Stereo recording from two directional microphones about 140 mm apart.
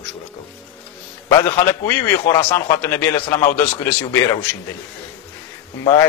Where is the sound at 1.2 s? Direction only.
20° left (ahead or behind).